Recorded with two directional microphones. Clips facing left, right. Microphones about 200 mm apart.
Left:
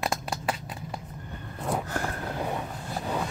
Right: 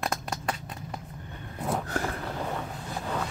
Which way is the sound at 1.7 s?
Centre (ahead or behind).